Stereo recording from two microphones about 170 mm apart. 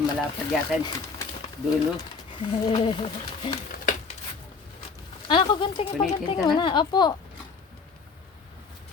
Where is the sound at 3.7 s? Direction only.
60° left (ahead or behind).